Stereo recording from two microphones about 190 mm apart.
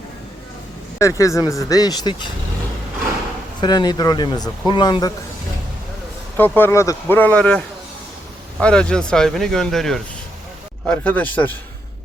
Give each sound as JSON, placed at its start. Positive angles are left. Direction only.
{"t": 0.9, "sound": "speech", "side_deg": 15}
{"t": 3.6, "sound": "speech", "side_deg": 20}
{"t": 6.3, "sound": "speech", "side_deg": 10}